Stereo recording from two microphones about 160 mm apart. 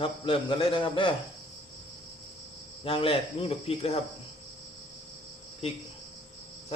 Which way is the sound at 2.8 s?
35° left (ahead or behind).